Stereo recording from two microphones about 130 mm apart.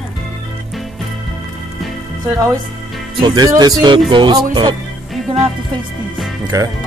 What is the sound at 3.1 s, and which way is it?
Speech, 35° right (ahead or behind).